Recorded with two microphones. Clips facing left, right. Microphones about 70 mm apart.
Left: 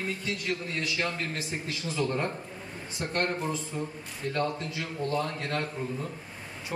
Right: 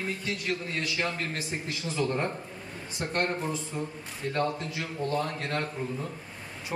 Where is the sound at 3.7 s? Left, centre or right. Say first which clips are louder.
Even; centre.